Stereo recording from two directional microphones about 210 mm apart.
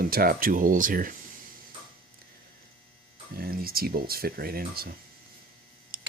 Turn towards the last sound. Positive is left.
turn(degrees=-45)  # may be behind; listen again after turning